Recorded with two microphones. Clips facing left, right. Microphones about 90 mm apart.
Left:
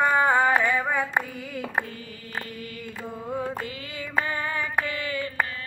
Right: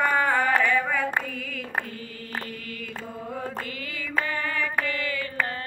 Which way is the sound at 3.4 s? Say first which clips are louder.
Left 1 dB; 20° left (ahead or behind).